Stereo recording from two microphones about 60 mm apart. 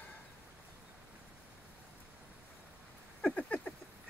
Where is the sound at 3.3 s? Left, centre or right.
Left.